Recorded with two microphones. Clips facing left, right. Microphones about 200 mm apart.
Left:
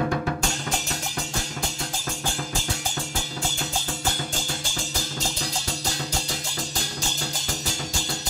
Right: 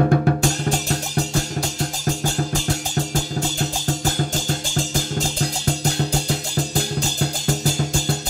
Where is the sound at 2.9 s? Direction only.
40° right (ahead or behind).